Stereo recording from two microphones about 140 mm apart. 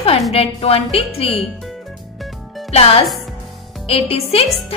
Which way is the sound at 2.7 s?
45° left (ahead or behind).